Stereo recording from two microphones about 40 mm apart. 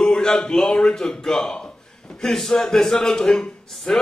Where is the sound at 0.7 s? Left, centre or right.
Centre.